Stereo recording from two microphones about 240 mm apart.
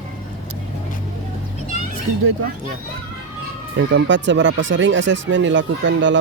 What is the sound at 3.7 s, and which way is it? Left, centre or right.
Speech, right.